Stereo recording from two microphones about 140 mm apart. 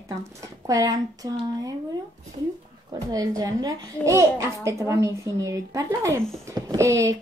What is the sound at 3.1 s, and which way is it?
A child's voice, 25° right (ahead or behind).